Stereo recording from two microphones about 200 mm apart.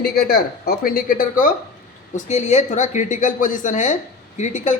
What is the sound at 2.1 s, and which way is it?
A man's voice, 35° left (ahead or behind).